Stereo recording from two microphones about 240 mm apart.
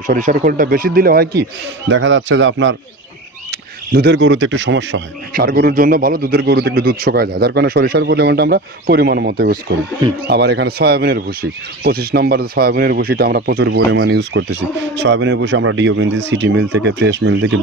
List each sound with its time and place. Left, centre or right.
0.0 s speech: right
3.9 s speech: right